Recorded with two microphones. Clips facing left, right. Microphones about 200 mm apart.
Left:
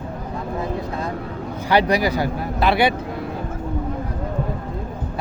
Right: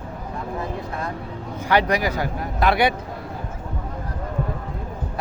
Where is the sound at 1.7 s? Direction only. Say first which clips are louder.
Left 2 dB; 35° left (ahead or behind).